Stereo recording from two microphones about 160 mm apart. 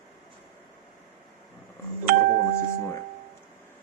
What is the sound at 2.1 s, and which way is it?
Doorbell, 60° right (ahead or behind).